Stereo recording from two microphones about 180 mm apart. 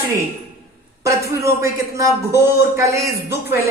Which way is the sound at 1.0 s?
15° right (ahead or behind).